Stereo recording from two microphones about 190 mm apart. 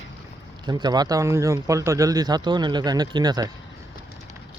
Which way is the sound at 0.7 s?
20° right (ahead or behind).